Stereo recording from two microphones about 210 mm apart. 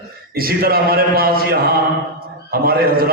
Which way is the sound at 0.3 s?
45° right (ahead or behind).